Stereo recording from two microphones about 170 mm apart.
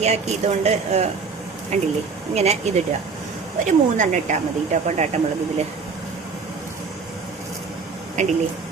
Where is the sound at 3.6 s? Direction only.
45° right (ahead or behind).